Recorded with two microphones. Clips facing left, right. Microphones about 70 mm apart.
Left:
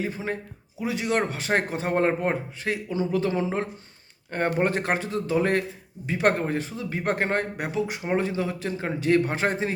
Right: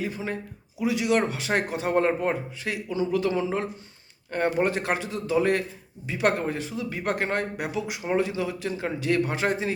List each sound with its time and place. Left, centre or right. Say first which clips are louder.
0.0 s speech: left 1 dB; left